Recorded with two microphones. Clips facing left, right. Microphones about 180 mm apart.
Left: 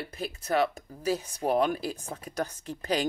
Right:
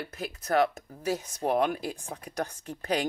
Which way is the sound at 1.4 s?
35° left (ahead or behind).